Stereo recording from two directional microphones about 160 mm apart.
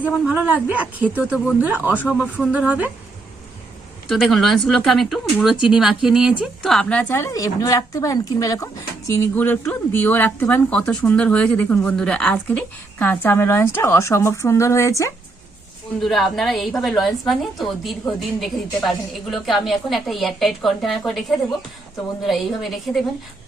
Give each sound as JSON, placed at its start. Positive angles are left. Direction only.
{"t": 0.3, "sound": "speech", "side_deg": -10}
{"t": 4.1, "sound": "a woman's voice", "side_deg": 0}
{"t": 16.0, "sound": "a woman's voice", "side_deg": 0}